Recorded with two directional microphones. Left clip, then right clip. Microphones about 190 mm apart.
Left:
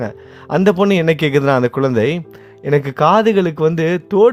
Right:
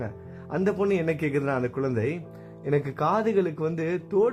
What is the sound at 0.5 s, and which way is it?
Speech, 35° left (ahead or behind).